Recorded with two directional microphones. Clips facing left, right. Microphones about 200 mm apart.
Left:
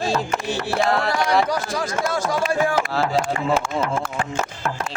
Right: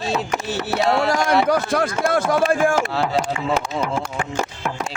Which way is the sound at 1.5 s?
55° right (ahead or behind).